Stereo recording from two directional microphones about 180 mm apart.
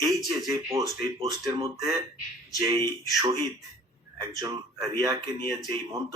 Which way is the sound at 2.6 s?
20° right (ahead or behind).